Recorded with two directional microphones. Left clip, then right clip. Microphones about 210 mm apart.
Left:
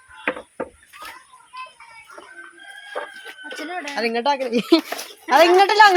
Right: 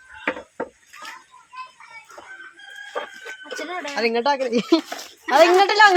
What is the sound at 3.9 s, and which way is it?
Speech, 10° right (ahead or behind).